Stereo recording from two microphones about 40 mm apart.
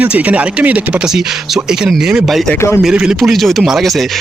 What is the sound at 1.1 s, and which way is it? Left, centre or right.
Speech, centre.